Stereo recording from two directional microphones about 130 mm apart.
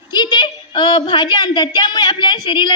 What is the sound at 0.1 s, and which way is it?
A woman's voice, 35° left (ahead or behind).